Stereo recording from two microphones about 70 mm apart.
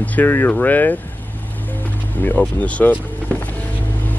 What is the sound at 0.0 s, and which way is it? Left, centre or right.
Speech, left.